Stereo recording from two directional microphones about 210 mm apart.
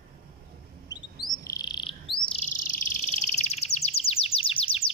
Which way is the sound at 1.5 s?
20° left (ahead or behind).